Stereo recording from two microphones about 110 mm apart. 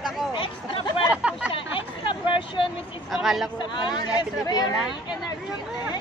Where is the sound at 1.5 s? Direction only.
50° left (ahead or behind).